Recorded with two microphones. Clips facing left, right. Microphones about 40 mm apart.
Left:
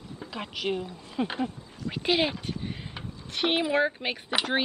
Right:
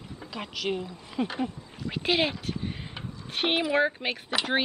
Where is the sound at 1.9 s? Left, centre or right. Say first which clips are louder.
Even; centre.